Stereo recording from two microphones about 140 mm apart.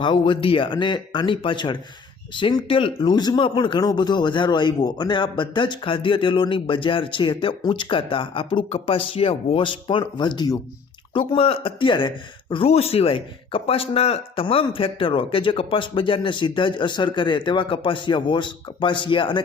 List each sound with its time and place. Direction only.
0.0 s speech: 35° left (ahead or behind)